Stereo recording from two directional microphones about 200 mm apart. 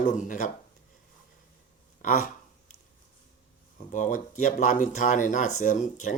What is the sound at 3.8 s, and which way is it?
Speech, 40° left (ahead or behind).